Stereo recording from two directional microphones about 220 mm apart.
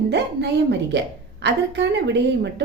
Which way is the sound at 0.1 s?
50° right (ahead or behind).